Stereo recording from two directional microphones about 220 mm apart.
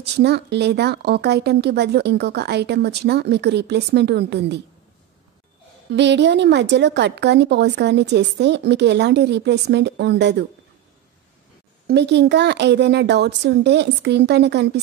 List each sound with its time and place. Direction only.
0.0 s a woman's voice: 50° right (ahead or behind)
5.9 s a woman's voice: 50° right (ahead or behind)
11.9 s a woman's voice: 50° right (ahead or behind)